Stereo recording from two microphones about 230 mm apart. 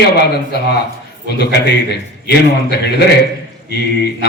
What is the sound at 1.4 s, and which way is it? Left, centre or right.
Speech, left.